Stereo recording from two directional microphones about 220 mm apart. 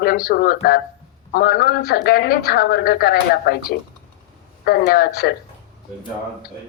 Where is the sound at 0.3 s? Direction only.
45° left (ahead or behind).